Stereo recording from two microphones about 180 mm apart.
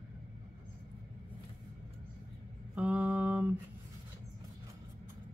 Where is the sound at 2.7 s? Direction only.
10° right (ahead or behind).